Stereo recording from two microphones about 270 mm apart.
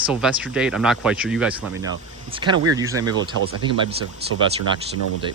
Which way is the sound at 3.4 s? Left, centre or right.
Right.